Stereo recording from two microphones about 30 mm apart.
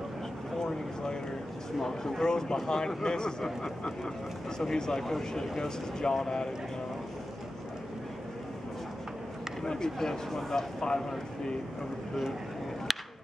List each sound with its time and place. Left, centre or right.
0.6 s a sound: left
1.8 s speech: centre
9.7 s speech: left